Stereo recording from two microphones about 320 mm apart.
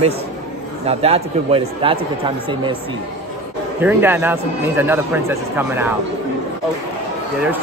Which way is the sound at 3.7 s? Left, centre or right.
Centre.